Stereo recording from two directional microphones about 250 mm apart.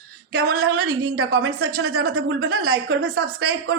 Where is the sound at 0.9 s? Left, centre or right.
Right.